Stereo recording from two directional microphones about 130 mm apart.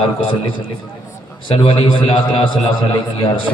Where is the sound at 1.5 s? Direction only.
45° left (ahead or behind).